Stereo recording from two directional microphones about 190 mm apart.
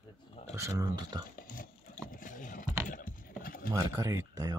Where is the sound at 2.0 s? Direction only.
45° left (ahead or behind).